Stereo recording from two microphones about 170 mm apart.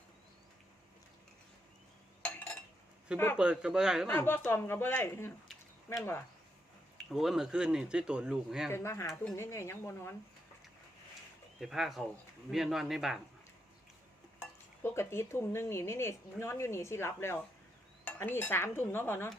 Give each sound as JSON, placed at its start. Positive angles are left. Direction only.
{"t": 3.3, "sound": "speech", "side_deg": -5}
{"t": 4.1, "sound": "speech", "side_deg": 15}
{"t": 7.1, "sound": "speech", "side_deg": 0}
{"t": 8.7, "sound": "speech", "side_deg": 15}
{"t": 11.6, "sound": "speech", "side_deg": 0}
{"t": 14.8, "sound": "speech", "side_deg": 15}